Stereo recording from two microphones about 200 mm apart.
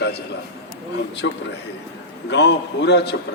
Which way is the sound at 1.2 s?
65° left (ahead or behind).